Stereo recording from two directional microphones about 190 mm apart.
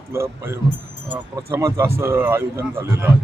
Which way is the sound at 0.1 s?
15° right (ahead or behind).